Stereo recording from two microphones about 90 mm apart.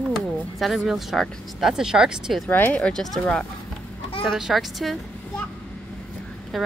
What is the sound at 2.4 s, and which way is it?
Speech, 15° left (ahead or behind).